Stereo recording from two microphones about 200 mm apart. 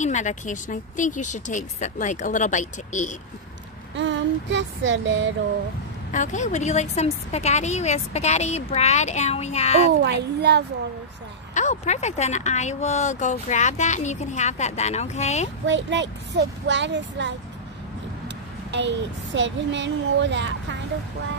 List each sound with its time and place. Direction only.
0.0 s speech: 35° left (ahead or behind)
3.9 s a sound: 65° right (ahead or behind)
6.1 s speech: 35° left (ahead or behind)
10.0 s speech: 60° right (ahead or behind)
11.5 s speech: 35° left (ahead or behind)
15.6 s speech: 65° right (ahead or behind)
18.7 s speech: 60° right (ahead or behind)